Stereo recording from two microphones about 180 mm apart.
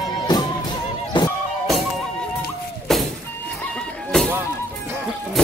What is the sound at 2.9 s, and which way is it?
Vehicle, centre (ahead or behind).